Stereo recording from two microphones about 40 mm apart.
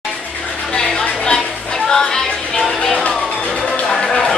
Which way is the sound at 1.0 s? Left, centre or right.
Left.